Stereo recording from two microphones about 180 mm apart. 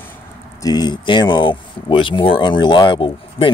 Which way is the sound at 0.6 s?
20° left (ahead or behind).